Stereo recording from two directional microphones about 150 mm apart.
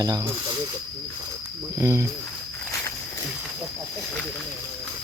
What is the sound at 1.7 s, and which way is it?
Speech, 20° right (ahead or behind).